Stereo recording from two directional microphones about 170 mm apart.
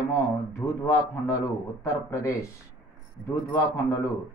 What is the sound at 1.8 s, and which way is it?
Speech, 20° left (ahead or behind).